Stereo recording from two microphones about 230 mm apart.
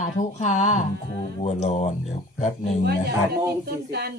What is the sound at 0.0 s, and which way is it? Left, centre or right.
Speech, left.